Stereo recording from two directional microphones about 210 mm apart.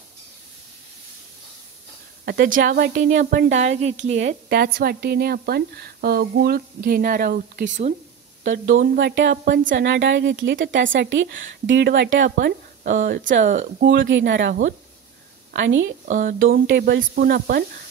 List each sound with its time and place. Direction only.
2.2 s a woman's voice: 45° right (ahead or behind)
13.8 s a woman's voice: 60° right (ahead or behind)
15.5 s a woman's voice: 60° right (ahead or behind)
16.1 s speech: 40° right (ahead or behind)
16.6 s a woman's voice: 50° right (ahead or behind)